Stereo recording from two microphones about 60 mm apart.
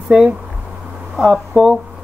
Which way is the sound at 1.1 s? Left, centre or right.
Centre.